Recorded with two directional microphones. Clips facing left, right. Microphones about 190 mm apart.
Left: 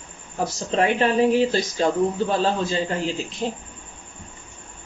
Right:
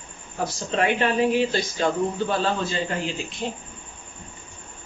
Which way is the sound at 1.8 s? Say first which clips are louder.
Left 2 dB; 35° left (ahead or behind).